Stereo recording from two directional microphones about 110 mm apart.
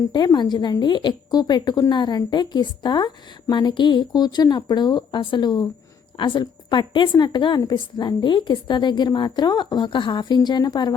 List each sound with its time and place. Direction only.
0.1 s a woman's voice: 40° left (ahead or behind)